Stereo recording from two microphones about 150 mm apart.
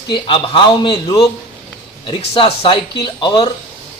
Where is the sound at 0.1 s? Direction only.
30° left (ahead or behind).